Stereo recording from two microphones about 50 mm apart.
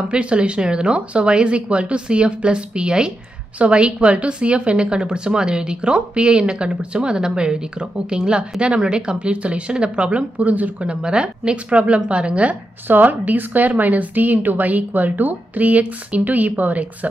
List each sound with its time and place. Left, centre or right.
0.1 s a woman's voice: right
12.8 s a woman's voice: right